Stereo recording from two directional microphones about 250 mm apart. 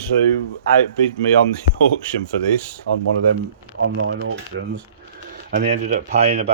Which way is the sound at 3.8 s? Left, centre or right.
Right.